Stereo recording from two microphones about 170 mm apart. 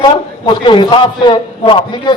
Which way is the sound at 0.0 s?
25° left (ahead or behind).